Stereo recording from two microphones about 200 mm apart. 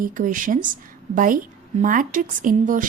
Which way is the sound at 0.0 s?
40° right (ahead or behind).